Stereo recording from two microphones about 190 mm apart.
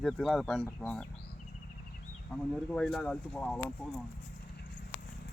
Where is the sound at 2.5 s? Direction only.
Centre (ahead or behind).